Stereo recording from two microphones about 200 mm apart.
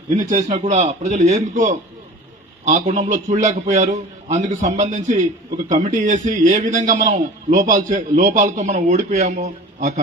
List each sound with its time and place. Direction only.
0.2 s a man's voice: 35° right (ahead or behind)